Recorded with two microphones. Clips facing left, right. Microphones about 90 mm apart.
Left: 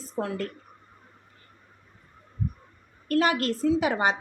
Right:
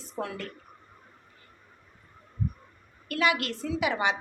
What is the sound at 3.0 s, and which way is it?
A woman's voice, 40° left (ahead or behind).